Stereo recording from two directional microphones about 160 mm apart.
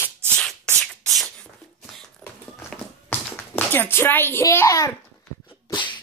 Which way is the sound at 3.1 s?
10° left (ahead or behind).